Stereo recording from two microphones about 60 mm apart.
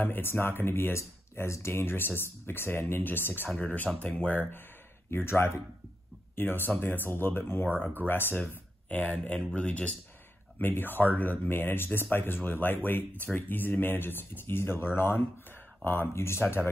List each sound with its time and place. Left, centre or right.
0.0 s speech: left
5.1 s speech: left
6.3 s speech: left
8.8 s a sound: left
9.6 s speech: centre
10.6 s speech: left
16.2 s speech: left